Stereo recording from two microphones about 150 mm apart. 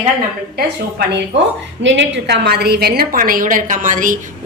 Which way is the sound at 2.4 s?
90° right.